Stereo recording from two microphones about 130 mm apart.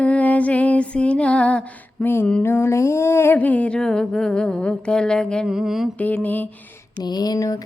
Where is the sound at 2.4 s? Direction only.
20° left (ahead or behind); by 5.9 s 5° right (ahead or behind).